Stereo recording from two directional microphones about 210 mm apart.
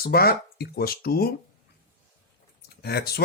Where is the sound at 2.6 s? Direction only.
50° left (ahead or behind).